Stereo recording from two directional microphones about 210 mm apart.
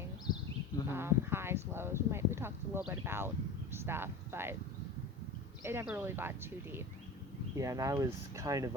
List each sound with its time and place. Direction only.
0.9 s speech: 10° right (ahead or behind)
5.6 s speech: 10° right (ahead or behind)